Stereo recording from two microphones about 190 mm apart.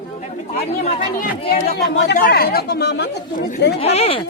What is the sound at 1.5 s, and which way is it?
Speech, 50° left (ahead or behind).